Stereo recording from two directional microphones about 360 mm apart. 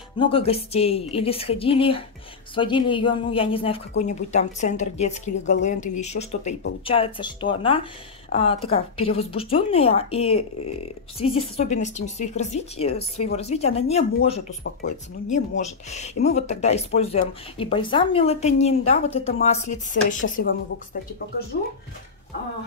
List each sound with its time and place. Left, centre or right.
0.2 s a woman's voice: centre